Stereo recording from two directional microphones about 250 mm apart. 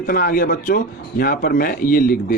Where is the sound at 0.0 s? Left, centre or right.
Left.